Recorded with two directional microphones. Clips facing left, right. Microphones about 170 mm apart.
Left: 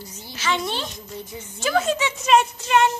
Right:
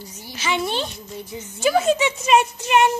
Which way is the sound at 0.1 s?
15° right (ahead or behind).